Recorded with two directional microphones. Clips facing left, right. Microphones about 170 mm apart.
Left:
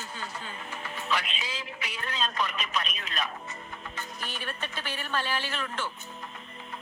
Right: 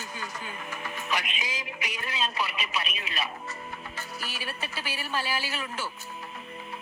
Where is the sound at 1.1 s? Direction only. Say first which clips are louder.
Left 1 dB; 15° right (ahead or behind).